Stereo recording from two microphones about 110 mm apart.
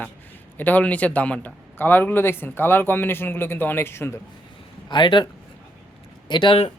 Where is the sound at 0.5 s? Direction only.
15° left (ahead or behind).